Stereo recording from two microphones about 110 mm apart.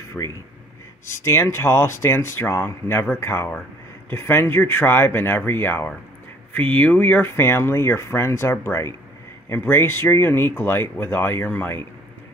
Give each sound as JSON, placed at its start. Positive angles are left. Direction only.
{"t": 0.2, "sound": "speech", "side_deg": 15}
{"t": 1.0, "sound": "speech", "side_deg": 25}